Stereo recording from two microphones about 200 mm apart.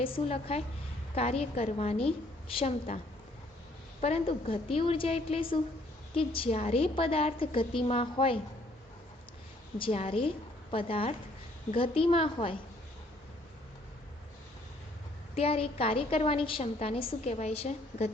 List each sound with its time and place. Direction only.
0.0 s a woman's voice: 30° left (ahead or behind)
4.0 s a woman's voice: 30° left (ahead or behind)
9.7 s a woman's voice: 30° left (ahead or behind)
15.4 s a woman's voice: 30° left (ahead or behind)